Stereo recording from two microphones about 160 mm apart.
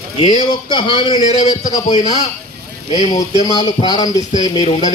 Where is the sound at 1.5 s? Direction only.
25° left (ahead or behind).